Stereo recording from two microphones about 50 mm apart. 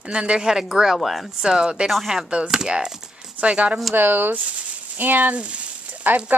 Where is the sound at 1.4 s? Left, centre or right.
Centre.